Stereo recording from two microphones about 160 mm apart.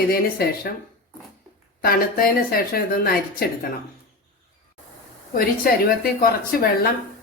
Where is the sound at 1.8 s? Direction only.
65° left (ahead or behind).